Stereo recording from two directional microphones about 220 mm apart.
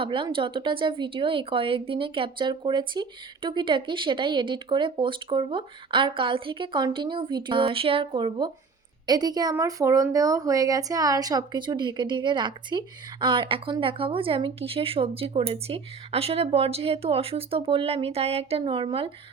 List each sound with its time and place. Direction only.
0.0 s speech: 25° right (ahead or behind)